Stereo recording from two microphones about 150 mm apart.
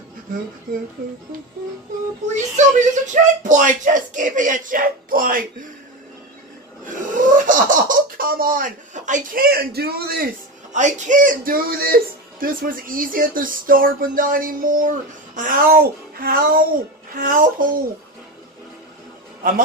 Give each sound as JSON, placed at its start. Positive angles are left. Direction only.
{"t": 2.2, "sound": "speech", "side_deg": -55}
{"t": 6.8, "sound": "speech", "side_deg": -60}
{"t": 10.7, "sound": "speech", "side_deg": -55}